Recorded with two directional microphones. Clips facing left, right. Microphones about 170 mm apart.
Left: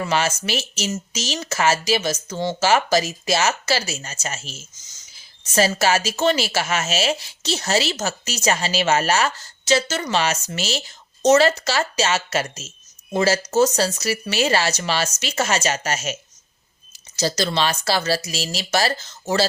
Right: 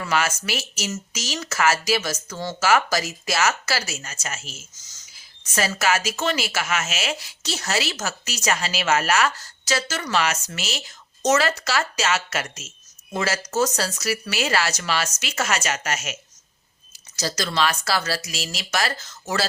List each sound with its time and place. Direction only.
0.0 s a woman's voice: 25° left (ahead or behind)
17.2 s a woman's voice: 30° left (ahead or behind)